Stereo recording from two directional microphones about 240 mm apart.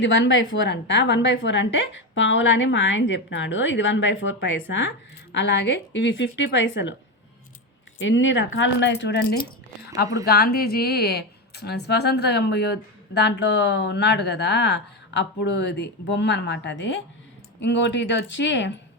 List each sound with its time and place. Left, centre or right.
0.0 s speech: left
7.9 s speech: left
10.2 s speech: left